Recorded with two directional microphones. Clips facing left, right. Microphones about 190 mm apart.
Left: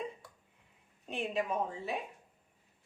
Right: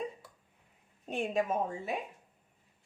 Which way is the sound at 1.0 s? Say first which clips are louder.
Right 3 dB; 45° right (ahead or behind).